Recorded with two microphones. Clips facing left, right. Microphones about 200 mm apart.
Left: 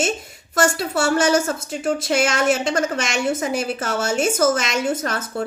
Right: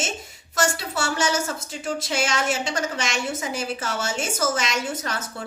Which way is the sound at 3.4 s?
55° left (ahead or behind).